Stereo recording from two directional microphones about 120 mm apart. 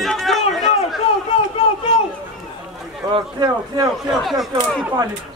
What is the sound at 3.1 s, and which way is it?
Speech, 35° right (ahead or behind).